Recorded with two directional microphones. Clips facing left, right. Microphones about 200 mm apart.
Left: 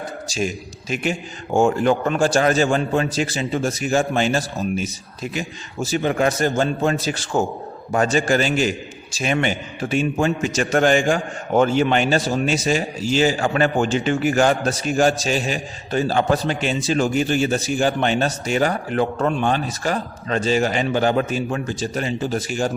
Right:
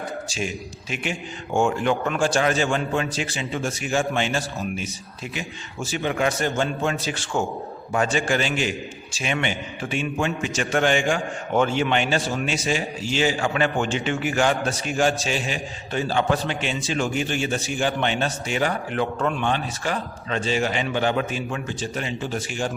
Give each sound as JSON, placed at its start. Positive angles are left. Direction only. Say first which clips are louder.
{"t": 0.3, "sound": "a man's voice", "louder": "left 4 dB", "side_deg": 40}